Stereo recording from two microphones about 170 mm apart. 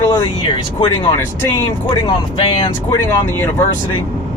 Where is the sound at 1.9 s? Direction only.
30° left (ahead or behind).